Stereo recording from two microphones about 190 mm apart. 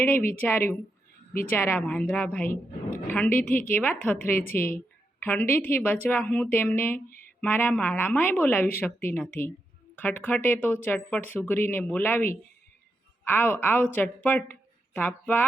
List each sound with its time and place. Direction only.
0.0 s a woman's voice: 10° left (ahead or behind)